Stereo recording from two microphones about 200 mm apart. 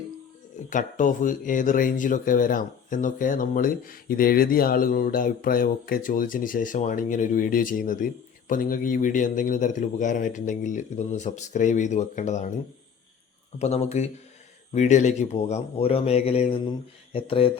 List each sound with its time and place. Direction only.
0.7 s speech: 40° left (ahead or behind)
13.6 s speech: 35° left (ahead or behind)